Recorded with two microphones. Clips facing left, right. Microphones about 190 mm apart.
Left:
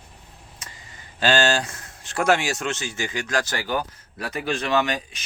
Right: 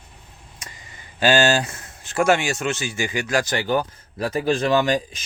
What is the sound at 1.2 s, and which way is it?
Speech, 10° right (ahead or behind).